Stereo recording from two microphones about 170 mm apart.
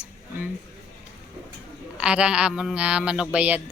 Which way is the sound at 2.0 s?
5° right (ahead or behind).